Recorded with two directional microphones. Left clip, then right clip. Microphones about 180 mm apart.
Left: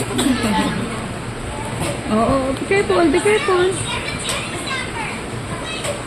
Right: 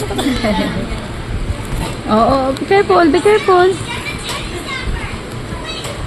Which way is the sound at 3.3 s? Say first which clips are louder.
Right 6 dB; 30° right (ahead or behind).